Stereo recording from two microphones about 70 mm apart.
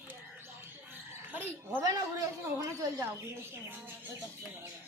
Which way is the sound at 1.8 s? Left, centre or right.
Right.